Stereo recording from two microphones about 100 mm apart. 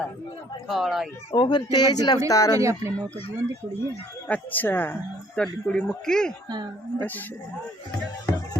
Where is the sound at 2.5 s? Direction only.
30° right (ahead or behind).